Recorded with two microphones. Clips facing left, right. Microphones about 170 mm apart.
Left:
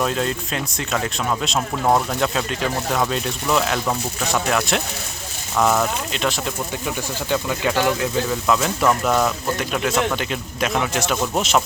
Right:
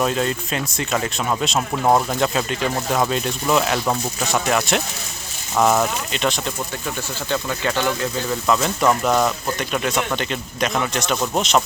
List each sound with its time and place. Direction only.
0.0 s speech: centre (ahead or behind)
8.3 s speech: centre (ahead or behind)